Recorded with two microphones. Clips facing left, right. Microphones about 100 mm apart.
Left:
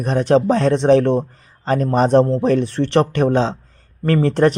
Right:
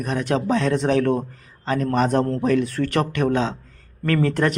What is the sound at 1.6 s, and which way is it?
A man's voice, 40° left (ahead or behind).